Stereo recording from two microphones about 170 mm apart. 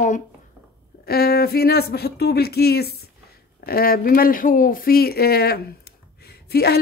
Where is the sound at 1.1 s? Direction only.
65° left (ahead or behind).